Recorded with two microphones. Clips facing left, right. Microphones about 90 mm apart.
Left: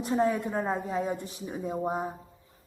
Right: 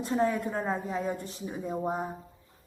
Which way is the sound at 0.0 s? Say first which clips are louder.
Left 1 dB; 15° left (ahead or behind).